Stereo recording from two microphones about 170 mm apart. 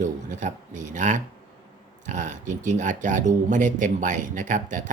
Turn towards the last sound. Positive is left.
turn(degrees=-50)  # may be behind; listen again after turning